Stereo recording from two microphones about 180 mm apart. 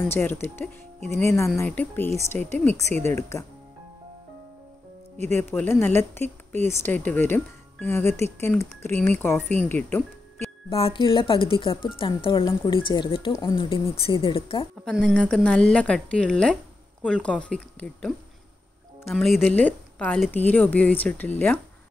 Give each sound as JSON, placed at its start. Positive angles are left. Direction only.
{"t": 0.1, "sound": "a woman's voice", "side_deg": 10}
{"t": 5.1, "sound": "speech", "side_deg": -40}
{"t": 5.4, "sound": "a woman's voice", "side_deg": 10}
{"t": 10.7, "sound": "speech", "side_deg": 30}
{"t": 14.9, "sound": "a woman's voice", "side_deg": 5}